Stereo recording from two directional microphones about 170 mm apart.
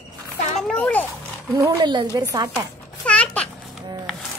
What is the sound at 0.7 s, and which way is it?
Speech, 10° left (ahead or behind).